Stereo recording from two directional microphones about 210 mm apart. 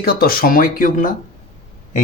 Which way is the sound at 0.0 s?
45° left (ahead or behind).